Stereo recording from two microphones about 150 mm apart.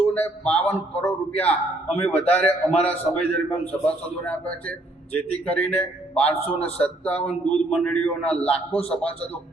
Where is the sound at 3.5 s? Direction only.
10° left (ahead or behind).